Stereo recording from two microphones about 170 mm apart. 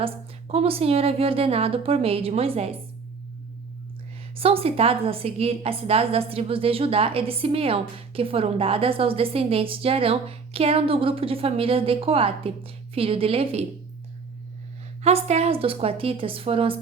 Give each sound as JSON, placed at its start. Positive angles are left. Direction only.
{"t": 0.0, "sound": "a woman's voice", "side_deg": -35}
{"t": 4.4, "sound": "a woman's voice", "side_deg": -35}
{"t": 15.0, "sound": "a woman's voice", "side_deg": -40}